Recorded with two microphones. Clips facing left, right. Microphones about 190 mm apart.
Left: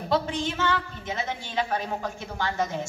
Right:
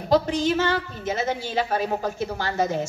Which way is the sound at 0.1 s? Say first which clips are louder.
Right 6 dB; 40° right (ahead or behind).